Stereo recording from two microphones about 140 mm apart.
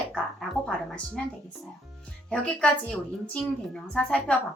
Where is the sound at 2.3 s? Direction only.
10° left (ahead or behind).